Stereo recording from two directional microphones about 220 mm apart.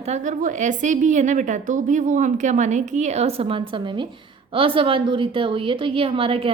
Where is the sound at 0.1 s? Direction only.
35° right (ahead or behind).